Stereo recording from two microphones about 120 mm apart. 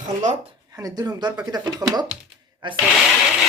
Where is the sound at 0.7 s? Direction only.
35° right (ahead or behind).